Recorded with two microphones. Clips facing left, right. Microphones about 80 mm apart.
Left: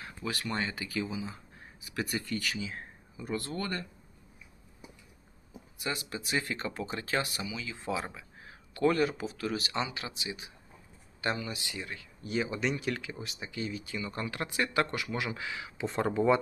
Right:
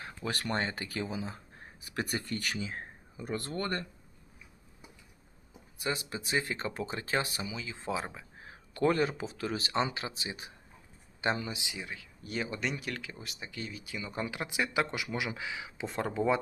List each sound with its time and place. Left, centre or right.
0.0 s speech: right
5.8 s speech: right
11.2 s speech: right; by 14.0 s centre
14.0 s speech: centre
15.9 s speech: centre